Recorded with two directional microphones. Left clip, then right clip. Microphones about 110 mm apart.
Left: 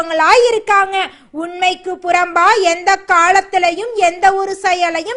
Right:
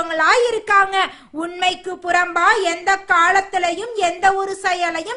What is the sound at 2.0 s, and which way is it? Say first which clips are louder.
Speech: left 3 dB; 35° left (ahead or behind).